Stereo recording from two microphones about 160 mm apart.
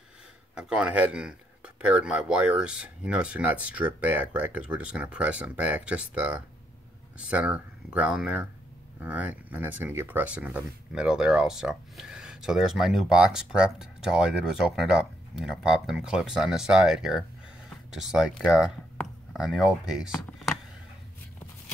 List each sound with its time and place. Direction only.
0.6 s speech: 5° right (ahead or behind)